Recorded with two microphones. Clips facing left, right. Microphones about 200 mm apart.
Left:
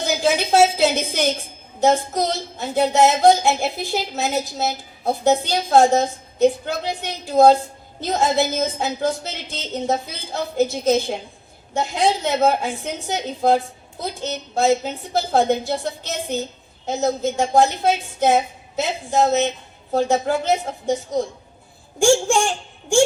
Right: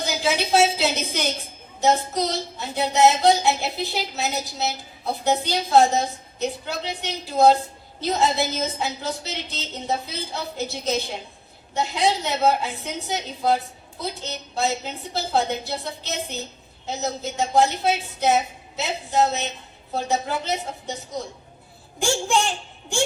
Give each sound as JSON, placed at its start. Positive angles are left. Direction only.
{"t": 0.0, "sound": "a woman's voice", "side_deg": 50}
{"t": 21.9, "sound": "a woman's voice", "side_deg": 50}